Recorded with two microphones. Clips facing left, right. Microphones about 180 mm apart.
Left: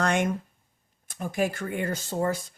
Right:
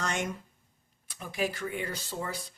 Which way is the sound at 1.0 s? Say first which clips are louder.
Left 5 dB; 50° left (ahead or behind).